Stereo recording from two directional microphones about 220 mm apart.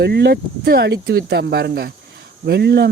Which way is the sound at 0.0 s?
50° right (ahead or behind).